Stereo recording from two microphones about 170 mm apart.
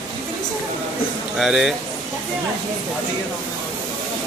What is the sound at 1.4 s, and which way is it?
Speech, 5° right (ahead or behind).